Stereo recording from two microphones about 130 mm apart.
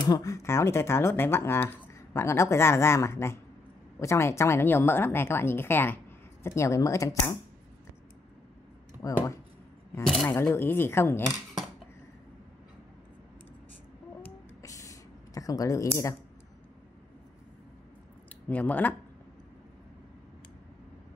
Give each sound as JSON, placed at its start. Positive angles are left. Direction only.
{"t": 0.0, "sound": "speech", "side_deg": 30}
{"t": 9.0, "sound": "speech", "side_deg": 25}
{"t": 10.2, "sound": "speech", "side_deg": 15}
{"t": 14.6, "sound": "a sound", "side_deg": 25}
{"t": 18.5, "sound": "speech", "side_deg": 10}